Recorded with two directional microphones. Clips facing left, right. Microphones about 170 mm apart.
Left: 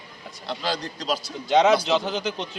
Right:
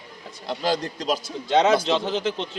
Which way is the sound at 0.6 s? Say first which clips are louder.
Right 4 dB; 45° right (ahead or behind).